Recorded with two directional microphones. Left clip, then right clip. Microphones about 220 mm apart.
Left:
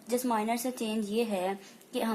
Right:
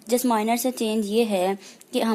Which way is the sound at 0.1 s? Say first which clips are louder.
Right 8 dB; 45° right (ahead or behind).